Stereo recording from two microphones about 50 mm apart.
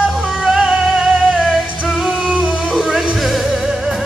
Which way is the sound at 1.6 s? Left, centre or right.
Right.